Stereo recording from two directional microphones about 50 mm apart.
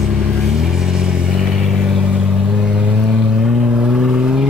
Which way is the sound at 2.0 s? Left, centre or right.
Right.